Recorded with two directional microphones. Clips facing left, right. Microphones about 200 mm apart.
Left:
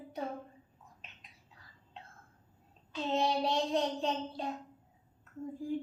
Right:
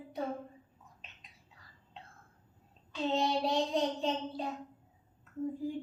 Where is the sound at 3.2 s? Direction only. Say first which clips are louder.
Left 1 dB; centre (ahead or behind).